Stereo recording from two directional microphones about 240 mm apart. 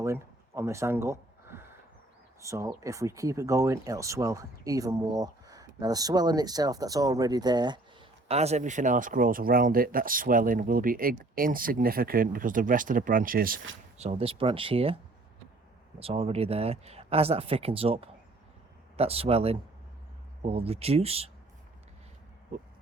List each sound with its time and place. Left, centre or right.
0.0 s a sound: centre
2.4 s speech: centre; by 13.6 s right
14.0 s speech: right
16.0 s speech: right